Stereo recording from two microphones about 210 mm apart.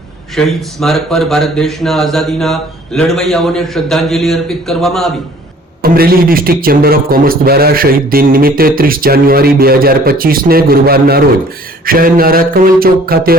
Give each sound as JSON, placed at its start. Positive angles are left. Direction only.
{"t": 0.3, "sound": "speech", "side_deg": 0}
{"t": 5.8, "sound": "a man's voice", "side_deg": -45}